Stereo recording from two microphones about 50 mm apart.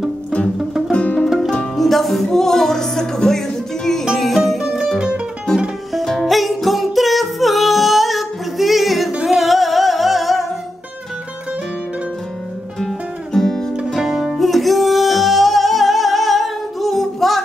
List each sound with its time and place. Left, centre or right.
0.9 s music: left
1.8 s music: centre
4.9 s music: centre
5.9 s music: centre
12.7 s music: centre
13.9 s music: centre